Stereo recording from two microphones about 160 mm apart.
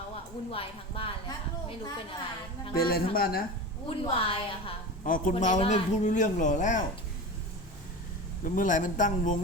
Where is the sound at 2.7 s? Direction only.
70° left (ahead or behind).